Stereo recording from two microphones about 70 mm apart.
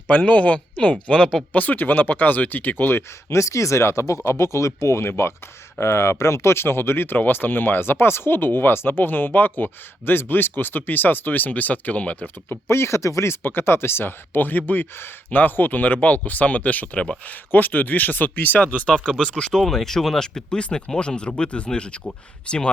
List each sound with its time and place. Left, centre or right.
0.1 s speech: left
12.6 s speech: left; by 22.7 s centre